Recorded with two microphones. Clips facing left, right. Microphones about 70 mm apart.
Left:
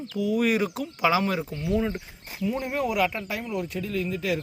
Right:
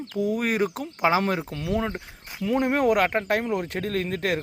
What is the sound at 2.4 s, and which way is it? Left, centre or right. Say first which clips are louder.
Speech: right 5 dB; right.